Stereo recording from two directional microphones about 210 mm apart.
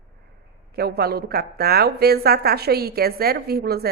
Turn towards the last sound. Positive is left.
turn(degrees=-50)  # may be behind; listen again after turning